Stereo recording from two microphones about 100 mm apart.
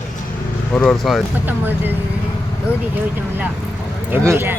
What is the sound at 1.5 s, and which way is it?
Speech, 20° right (ahead or behind).